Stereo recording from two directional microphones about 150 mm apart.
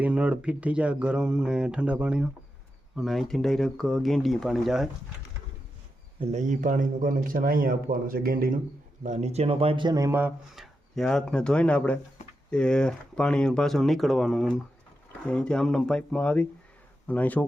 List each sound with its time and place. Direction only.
0.0 s speech: 10° right (ahead or behind)
6.1 s speech: 45° right (ahead or behind); by 8.5 s 75° right (ahead or behind)
9.0 s speech: 50° right (ahead or behind); by 10.3 s 15° right (ahead or behind)
10.5 s speech: centre (ahead or behind)